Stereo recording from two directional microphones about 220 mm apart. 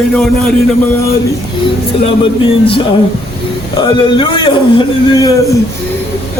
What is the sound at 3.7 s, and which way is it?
A man's voice, 20° left (ahead or behind).